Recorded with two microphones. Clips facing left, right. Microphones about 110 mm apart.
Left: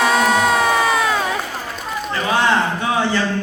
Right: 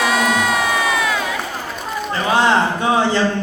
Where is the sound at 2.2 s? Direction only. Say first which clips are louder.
Right 2 dB; 30° right (ahead or behind).